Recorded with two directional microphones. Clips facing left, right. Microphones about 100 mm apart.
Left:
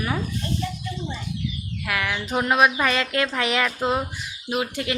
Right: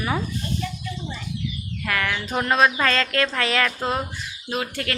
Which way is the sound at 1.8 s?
10° left (ahead or behind).